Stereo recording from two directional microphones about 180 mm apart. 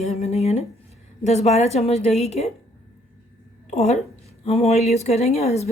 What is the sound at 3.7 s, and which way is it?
A woman's voice, 40° left (ahead or behind).